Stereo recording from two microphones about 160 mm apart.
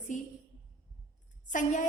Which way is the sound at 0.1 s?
50° left (ahead or behind).